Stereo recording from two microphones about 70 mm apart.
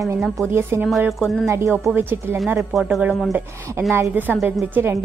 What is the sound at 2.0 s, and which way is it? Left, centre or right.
Speech, right.